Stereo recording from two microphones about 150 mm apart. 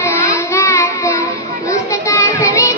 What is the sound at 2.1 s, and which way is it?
Children playing, 20° left (ahead or behind).